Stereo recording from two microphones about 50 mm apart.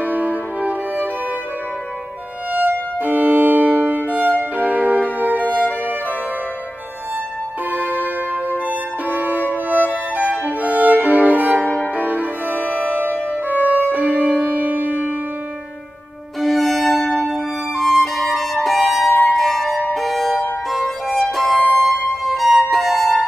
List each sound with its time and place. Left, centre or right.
0.0 s music: right
2.5 s music: right
4.1 s violin: right
4.6 s music: right
7.7 s music: right
11.6 s music: left
11.9 s music: right
12.5 s music: left
12.8 s music: right
16.3 s violin: centre
19.2 s music: centre